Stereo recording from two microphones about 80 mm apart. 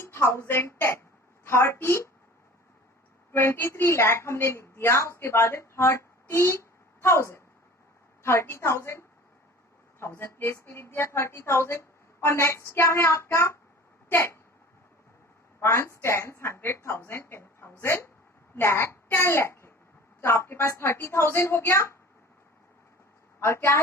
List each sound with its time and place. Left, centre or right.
0.0 s a woman's voice: left
3.3 s a woman's voice: left
15.6 s a woman's voice: left
23.4 s a woman's voice: left